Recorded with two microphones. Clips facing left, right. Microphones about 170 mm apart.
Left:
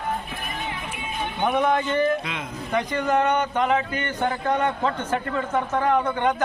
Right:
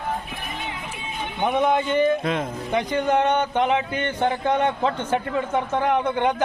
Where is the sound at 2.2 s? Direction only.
50° right (ahead or behind).